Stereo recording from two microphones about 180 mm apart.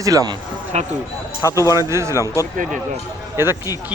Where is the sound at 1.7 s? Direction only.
15° right (ahead or behind).